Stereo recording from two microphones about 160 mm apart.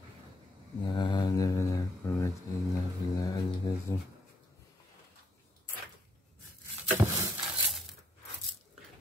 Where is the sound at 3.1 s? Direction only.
25° left (ahead or behind).